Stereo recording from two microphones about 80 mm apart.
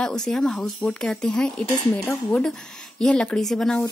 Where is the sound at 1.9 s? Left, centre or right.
Centre.